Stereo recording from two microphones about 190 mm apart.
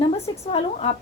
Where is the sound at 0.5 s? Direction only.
35° left (ahead or behind).